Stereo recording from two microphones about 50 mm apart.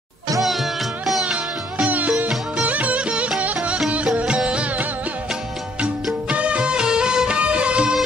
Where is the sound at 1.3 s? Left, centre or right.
Right.